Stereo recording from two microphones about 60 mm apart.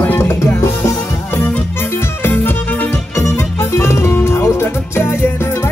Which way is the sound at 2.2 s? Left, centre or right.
Left.